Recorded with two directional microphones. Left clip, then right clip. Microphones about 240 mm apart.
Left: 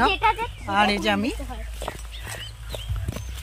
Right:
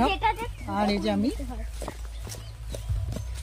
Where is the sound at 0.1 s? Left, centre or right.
Left.